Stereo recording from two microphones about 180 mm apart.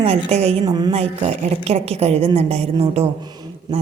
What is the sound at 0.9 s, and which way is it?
Speech, 35° right (ahead or behind).